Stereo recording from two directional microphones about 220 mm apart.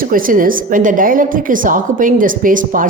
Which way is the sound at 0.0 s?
40° right (ahead or behind).